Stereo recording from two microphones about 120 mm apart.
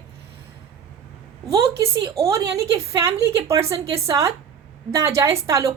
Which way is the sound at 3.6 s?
55° right (ahead or behind).